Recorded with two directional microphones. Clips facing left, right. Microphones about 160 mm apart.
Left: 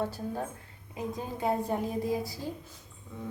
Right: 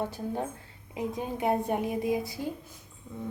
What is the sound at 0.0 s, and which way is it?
A woman's voice, 15° right (ahead or behind).